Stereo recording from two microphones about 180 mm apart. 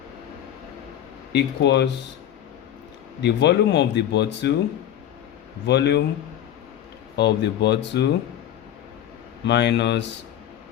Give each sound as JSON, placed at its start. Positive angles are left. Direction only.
{"t": 1.3, "sound": "speech", "side_deg": 70}
{"t": 3.2, "sound": "speech", "side_deg": 70}
{"t": 5.6, "sound": "speech", "side_deg": 65}
{"t": 7.2, "sound": "speech", "side_deg": 70}
{"t": 9.4, "sound": "speech", "side_deg": 70}